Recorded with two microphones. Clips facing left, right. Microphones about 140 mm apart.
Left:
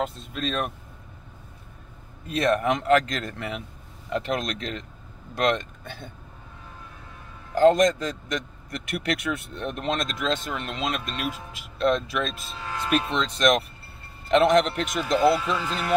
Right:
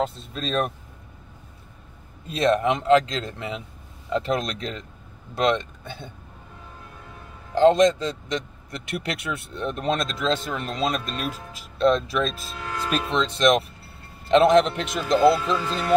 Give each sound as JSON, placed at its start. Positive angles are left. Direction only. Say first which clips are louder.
{"t": 0.0, "sound": "speech", "louder": "right 1 dB", "side_deg": -35}
{"t": 2.2, "sound": "a man's voice", "louder": "right 2 dB", "side_deg": -30}
{"t": 7.5, "sound": "a man's voice", "louder": "right 1 dB", "side_deg": -25}